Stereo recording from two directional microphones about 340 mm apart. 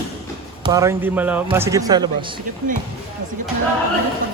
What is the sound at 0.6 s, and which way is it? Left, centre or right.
A man's voice, centre.